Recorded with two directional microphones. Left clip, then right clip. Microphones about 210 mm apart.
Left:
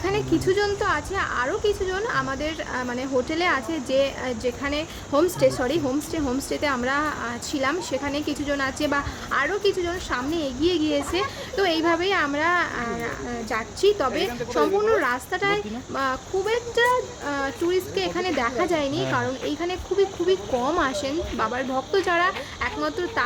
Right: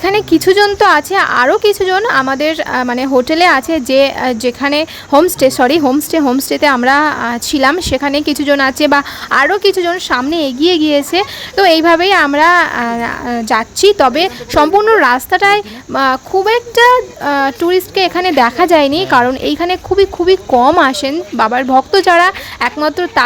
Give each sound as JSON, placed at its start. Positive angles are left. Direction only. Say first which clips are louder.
{"t": 0.0, "sound": "a woman's voice", "louder": "right 13 dB", "side_deg": -40}